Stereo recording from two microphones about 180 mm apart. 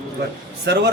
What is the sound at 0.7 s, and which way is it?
Speech, 70° right (ahead or behind).